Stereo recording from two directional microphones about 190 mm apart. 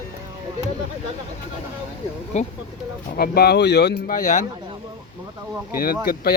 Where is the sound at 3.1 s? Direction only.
55° left (ahead or behind).